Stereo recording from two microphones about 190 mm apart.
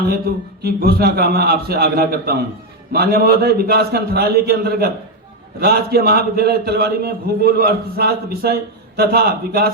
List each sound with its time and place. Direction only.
0.3 s a man's voice: 55° right (ahead or behind)